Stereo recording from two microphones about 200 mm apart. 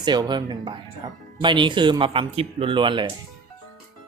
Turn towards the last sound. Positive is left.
turn(degrees=-25)  # may be behind; listen again after turning